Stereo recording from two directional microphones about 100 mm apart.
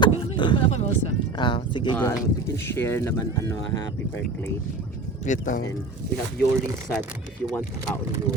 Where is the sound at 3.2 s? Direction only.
35° left (ahead or behind).